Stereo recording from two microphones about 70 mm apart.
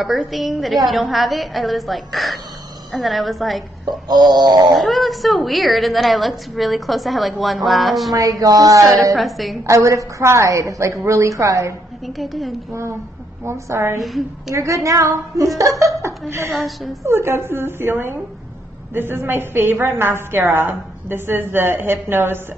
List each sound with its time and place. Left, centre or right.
0.0 s a woman's voice: centre
4.1 s a sound: right
4.7 s a woman's voice: centre
8.1 s a sound: right
9.1 s a woman's voice: centre
9.7 s a woman's voice: right
12.2 s a woman's voice: centre
13.5 s a woman's voice: right
13.9 s a woman's voice: centre
14.5 s a woman's voice: right
16.0 s speech: right
16.5 s a woman's voice: centre
17.0 s a woman's voice: right